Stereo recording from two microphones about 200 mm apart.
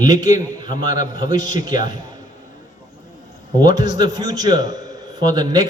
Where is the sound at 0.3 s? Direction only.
40° left (ahead or behind).